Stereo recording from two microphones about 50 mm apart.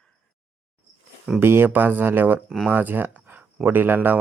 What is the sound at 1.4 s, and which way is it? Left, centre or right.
A man's voice, right.